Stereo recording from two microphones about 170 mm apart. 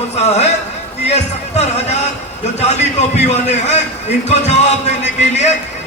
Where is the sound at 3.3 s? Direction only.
40° left (ahead or behind).